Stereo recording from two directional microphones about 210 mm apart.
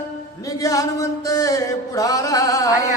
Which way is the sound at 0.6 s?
15° left (ahead or behind).